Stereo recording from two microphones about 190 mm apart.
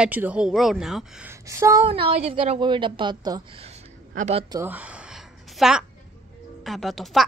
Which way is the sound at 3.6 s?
40° right (ahead or behind).